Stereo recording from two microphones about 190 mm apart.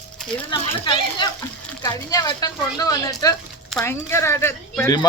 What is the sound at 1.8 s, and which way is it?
Speech, 20° left (ahead or behind).